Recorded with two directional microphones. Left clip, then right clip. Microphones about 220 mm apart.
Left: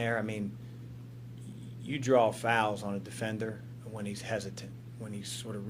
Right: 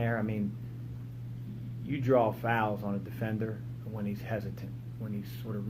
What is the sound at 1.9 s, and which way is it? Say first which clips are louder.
Speech: left 1 dB; 35° left (ahead or behind).